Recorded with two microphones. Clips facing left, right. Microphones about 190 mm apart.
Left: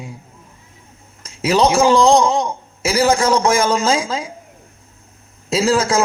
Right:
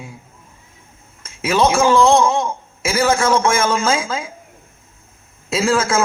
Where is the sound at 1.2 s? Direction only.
35° left (ahead or behind).